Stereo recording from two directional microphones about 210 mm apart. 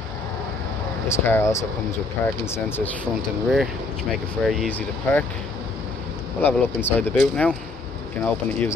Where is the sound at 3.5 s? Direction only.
Centre (ahead or behind).